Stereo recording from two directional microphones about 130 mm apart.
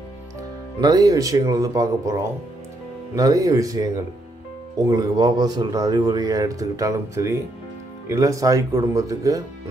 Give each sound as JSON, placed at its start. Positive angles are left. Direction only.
{"t": 0.7, "sound": "a man's voice", "side_deg": -30}